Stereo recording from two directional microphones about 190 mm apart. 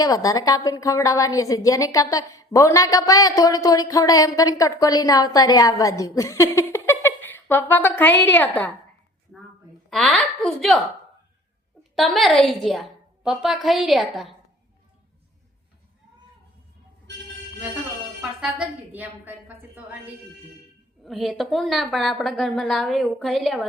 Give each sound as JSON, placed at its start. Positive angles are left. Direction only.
{"t": 0.0, "sound": "a woman's voice", "side_deg": 20}
{"t": 9.9, "sound": "a woman's voice", "side_deg": 5}
{"t": 11.8, "sound": "a woman's voice", "side_deg": 0}
{"t": 18.2, "sound": "music", "side_deg": -5}
{"t": 18.9, "sound": "a woman's voice", "side_deg": -10}
{"t": 21.0, "sound": "a woman's voice", "side_deg": 0}